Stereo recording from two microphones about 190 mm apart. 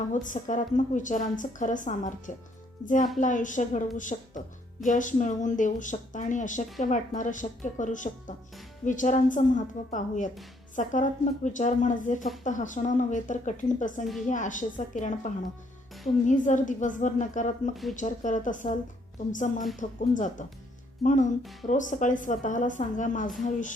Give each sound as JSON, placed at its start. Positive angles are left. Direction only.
{"t": 0.1, "sound": "a woman's voice", "side_deg": 40}